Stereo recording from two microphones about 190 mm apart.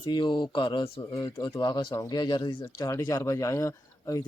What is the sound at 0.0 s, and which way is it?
Speech, 25° left (ahead or behind).